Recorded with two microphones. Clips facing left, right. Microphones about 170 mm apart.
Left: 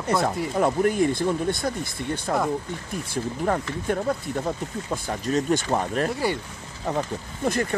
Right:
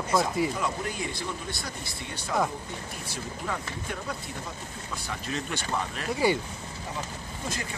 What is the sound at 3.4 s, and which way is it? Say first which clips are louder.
Speech: left 10 dB; 50° left (ahead or behind).